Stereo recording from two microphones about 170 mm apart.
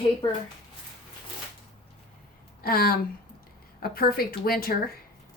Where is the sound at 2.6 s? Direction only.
60° left (ahead or behind).